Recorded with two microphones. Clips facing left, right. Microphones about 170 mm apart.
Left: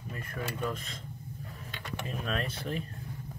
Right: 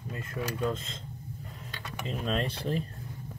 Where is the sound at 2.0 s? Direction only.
30° right (ahead or behind).